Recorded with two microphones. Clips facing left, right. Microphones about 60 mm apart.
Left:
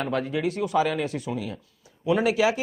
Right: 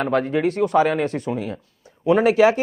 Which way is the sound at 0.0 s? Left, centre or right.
Right.